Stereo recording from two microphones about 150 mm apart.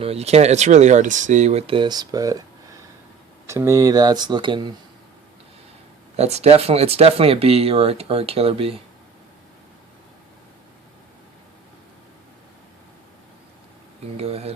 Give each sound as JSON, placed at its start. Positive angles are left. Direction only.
{"t": 0.0, "sound": "speech", "side_deg": -45}
{"t": 3.4, "sound": "speech", "side_deg": -20}
{"t": 6.1, "sound": "speech", "side_deg": -45}
{"t": 14.2, "sound": "speech", "side_deg": -40}